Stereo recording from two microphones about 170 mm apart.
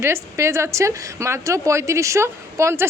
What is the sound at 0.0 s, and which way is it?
A woman's voice, 15° right (ahead or behind).